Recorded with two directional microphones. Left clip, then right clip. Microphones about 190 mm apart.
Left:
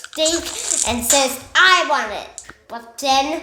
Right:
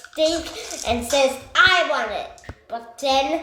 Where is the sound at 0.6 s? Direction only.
55° left (ahead or behind).